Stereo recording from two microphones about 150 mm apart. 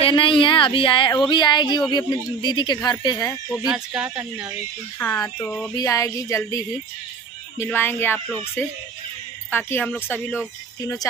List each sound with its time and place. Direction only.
0.0 s a woman's voice: 35° left (ahead or behind); by 3.6 s 15° left (ahead or behind)
3.6 s speech: 5° right (ahead or behind)
4.2 s speech: 20° right (ahead or behind)
4.9 s speech: 15° left (ahead or behind)
5.4 s a sound: centre (ahead or behind)
5.8 s a woman's voice: 20° left (ahead or behind)
9.5 s a woman's voice: 15° left (ahead or behind)